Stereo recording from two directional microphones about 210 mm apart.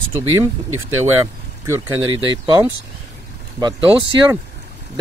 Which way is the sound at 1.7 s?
15° right (ahead or behind).